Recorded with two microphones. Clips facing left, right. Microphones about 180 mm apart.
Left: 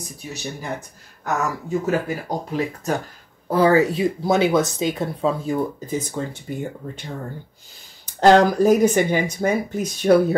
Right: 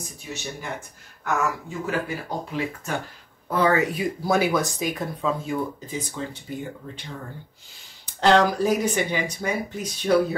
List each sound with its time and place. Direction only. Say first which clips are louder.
0.0 s speech: left 3 dB; 35° left (ahead or behind)
6.2 s speech: left 5 dB; 45° left (ahead or behind)
8.2 s speech: left 5 dB; 45° left (ahead or behind)